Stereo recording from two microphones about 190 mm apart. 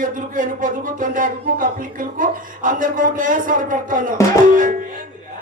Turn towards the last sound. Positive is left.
turn(degrees=-45)  # may be behind; listen again after turning